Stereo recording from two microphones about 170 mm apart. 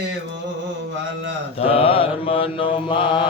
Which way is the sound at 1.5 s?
35° left (ahead or behind).